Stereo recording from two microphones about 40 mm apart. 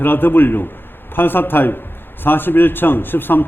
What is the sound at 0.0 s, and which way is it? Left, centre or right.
A man's voice, left.